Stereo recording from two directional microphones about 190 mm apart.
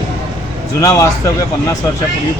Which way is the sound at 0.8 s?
20° left (ahead or behind).